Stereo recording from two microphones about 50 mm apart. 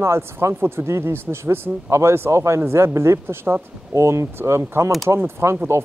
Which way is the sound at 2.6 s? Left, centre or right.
Right.